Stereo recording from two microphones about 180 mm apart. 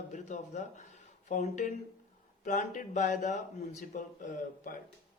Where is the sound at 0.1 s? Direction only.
40° left (ahead or behind).